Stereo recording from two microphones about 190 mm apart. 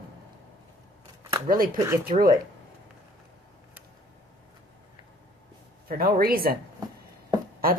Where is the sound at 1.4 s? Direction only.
45° right (ahead or behind).